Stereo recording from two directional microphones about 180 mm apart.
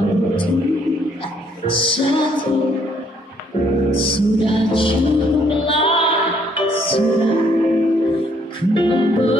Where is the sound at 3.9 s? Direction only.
30° left (ahead or behind).